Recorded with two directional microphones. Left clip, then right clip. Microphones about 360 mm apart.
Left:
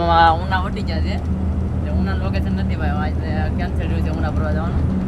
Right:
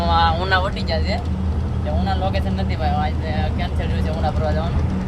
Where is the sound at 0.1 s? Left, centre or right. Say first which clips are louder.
Left 5 dB; centre.